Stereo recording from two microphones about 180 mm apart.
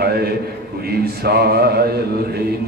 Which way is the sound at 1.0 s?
60° right (ahead or behind).